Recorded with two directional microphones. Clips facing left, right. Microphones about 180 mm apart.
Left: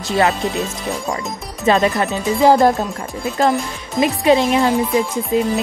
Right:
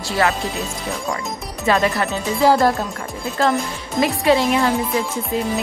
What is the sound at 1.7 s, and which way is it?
Speech, 20° left (ahead or behind).